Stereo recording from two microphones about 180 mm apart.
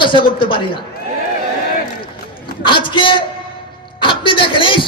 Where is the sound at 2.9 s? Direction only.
25° left (ahead or behind).